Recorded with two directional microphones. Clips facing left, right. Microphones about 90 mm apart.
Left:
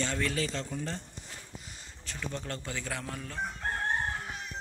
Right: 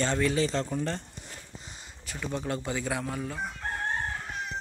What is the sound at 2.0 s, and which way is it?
Speech, 15° right (ahead or behind).